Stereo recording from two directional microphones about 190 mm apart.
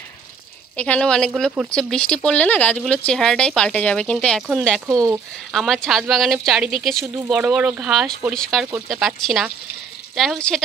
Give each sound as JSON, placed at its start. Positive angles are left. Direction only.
{"t": 0.7, "sound": "speech", "side_deg": 5}
{"t": 4.8, "sound": "speech", "side_deg": -15}
{"t": 5.5, "sound": "speech", "side_deg": 0}